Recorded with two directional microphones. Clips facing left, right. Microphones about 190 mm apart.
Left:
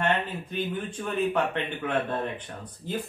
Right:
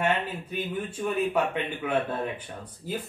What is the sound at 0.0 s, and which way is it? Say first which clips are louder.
Speech: even; 10° right (ahead or behind).